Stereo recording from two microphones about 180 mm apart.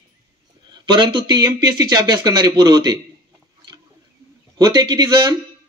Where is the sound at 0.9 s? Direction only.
25° right (ahead or behind).